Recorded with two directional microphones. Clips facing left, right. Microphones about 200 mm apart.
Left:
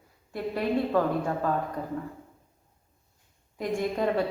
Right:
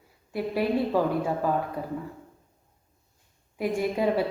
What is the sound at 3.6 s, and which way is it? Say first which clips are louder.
Speech: right 2 dB; 5° right (ahead or behind).